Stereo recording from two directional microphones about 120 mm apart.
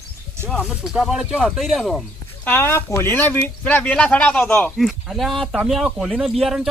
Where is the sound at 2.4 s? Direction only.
20° left (ahead or behind).